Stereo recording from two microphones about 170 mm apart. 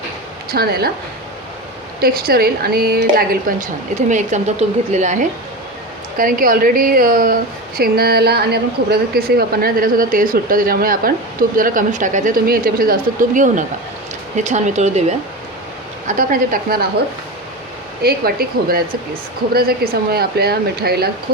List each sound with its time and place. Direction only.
0.5 s a woman's voice: 65° right (ahead or behind)
2.0 s a woman's voice: 60° right (ahead or behind)
4.1 s a woman's voice: 45° right (ahead or behind)
6.1 s a woman's voice: 55° right (ahead or behind)
16.0 s a woman's voice: 50° right (ahead or behind)
18.0 s a woman's voice: 65° right (ahead or behind)